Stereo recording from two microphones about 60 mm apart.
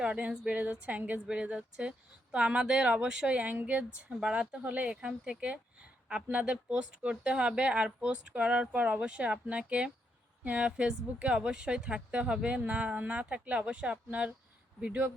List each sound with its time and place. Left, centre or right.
0.0 s speech: right